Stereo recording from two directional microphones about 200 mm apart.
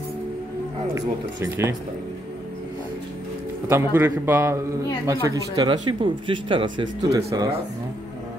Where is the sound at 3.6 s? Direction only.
10° right (ahead or behind).